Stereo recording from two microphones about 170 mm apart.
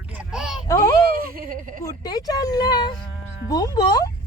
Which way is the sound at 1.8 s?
20° left (ahead or behind).